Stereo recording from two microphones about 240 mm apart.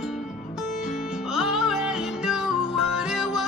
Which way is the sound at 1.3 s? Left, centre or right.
Centre.